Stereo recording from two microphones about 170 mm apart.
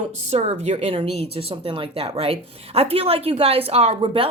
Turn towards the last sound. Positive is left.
turn(degrees=-35)  # may be behind; listen again after turning